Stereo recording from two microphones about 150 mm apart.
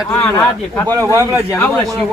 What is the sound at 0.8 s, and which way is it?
Speech, 25° right (ahead or behind).